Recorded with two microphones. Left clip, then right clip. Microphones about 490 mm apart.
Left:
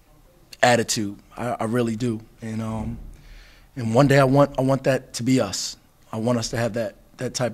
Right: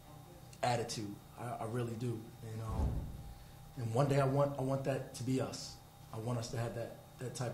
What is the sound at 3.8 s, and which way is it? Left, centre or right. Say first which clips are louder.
A man's voice: left 16 dB; left.